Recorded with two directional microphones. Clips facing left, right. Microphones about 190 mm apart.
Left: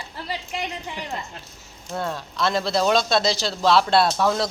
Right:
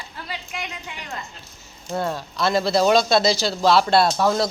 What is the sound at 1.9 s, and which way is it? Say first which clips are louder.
Speech: right 3 dB; 5° right (ahead or behind).